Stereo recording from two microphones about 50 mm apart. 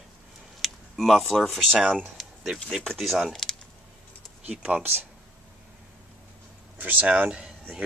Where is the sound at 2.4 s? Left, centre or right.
Centre.